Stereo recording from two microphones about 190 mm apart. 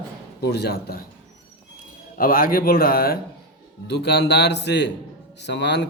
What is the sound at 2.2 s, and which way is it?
A man's voice, 50° left (ahead or behind).